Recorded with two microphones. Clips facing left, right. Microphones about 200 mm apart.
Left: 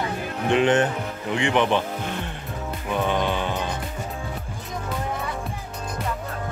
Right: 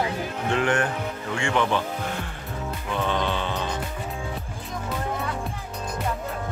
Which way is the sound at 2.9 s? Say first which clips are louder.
Left 3 dB; 15° left (ahead or behind).